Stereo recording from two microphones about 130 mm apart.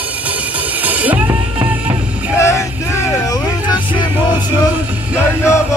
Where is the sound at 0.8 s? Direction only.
10° right (ahead or behind).